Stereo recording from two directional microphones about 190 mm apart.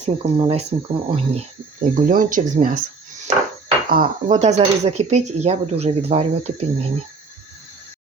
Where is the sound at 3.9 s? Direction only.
45° right (ahead or behind).